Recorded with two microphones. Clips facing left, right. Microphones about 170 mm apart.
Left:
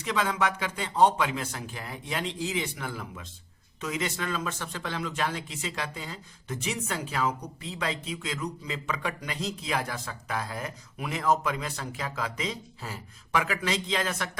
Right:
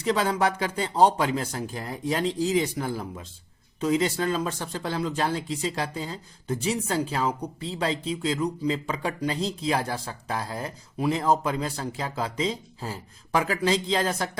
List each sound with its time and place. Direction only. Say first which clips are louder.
0.0 s speech: right 4 dB; 35° right (ahead or behind)